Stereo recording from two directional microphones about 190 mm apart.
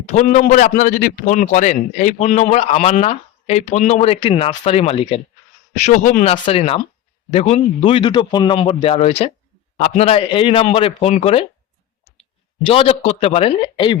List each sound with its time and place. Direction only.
0.1 s a man's voice: 40° left (ahead or behind)
6.3 s a man's voice: 30° left (ahead or behind)
12.6 s a man's voice: 30° left (ahead or behind)